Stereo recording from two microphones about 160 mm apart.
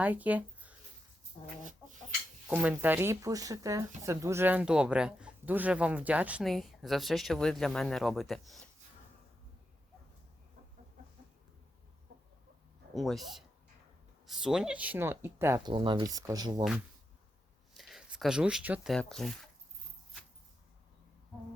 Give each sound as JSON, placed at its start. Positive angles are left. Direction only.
{"t": 0.0, "sound": "speech", "side_deg": -10}
{"t": 2.5, "sound": "speech", "side_deg": -10}
{"t": 12.9, "sound": "speech", "side_deg": 0}
{"t": 15.6, "sound": "speech", "side_deg": -30}
{"t": 17.7, "sound": "speech", "side_deg": 0}